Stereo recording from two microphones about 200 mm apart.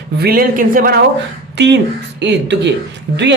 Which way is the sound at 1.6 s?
60° right (ahead or behind).